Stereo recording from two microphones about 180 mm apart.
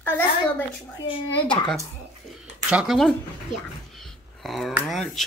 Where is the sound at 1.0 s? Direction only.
30° left (ahead or behind).